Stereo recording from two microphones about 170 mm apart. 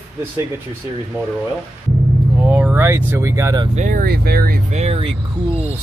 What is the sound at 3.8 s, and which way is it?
Speech, 55° right (ahead or behind).